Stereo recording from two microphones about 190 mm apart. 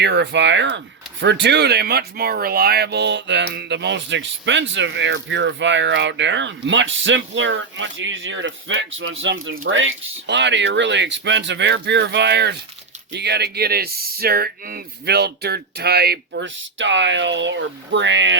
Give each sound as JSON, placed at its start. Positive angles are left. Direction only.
{"t": 0.0, "sound": "speech", "side_deg": -65}
{"t": 9.5, "sound": "speech", "side_deg": -80}